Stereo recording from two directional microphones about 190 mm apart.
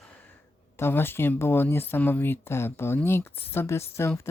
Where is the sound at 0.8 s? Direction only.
10° left (ahead or behind).